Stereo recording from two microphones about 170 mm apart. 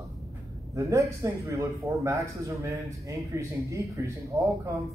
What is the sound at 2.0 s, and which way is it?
Speech, 20° right (ahead or behind).